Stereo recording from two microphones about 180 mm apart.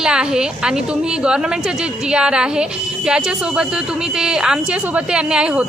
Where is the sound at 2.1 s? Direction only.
5° right (ahead or behind).